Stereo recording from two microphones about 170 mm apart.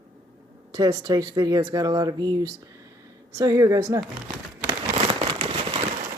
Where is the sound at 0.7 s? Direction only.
25° right (ahead or behind).